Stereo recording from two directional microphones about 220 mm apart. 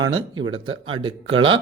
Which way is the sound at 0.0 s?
20° right (ahead or behind).